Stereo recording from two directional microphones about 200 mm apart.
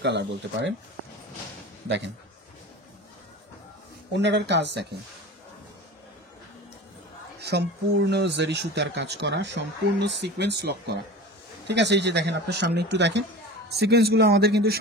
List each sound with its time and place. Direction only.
0.0 s speech: 65° right (ahead or behind)
4.1 s speech: 60° right (ahead or behind)
7.4 s speech: 55° right (ahead or behind)